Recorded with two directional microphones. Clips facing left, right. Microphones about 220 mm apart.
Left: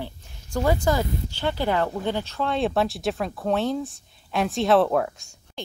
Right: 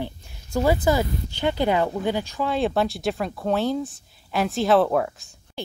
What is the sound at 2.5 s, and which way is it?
Speech, centre (ahead or behind).